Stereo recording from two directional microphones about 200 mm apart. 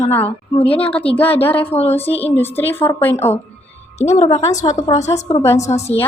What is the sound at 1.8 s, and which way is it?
Speech, 30° left (ahead or behind).